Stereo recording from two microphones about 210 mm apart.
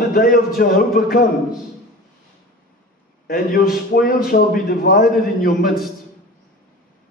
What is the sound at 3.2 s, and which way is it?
A man's voice, 45° left (ahead or behind).